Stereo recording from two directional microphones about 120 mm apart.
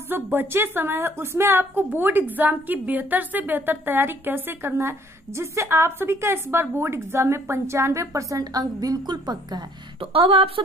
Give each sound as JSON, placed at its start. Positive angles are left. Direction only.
{"t": 0.1, "sound": "a woman's voice", "side_deg": -15}
{"t": 9.9, "sound": "speech", "side_deg": -50}